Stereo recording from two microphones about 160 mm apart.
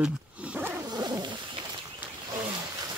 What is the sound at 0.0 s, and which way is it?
Roaring cats, 5° right (ahead or behind).